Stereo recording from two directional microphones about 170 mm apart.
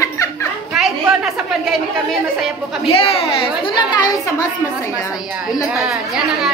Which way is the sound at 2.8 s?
35° left (ahead or behind).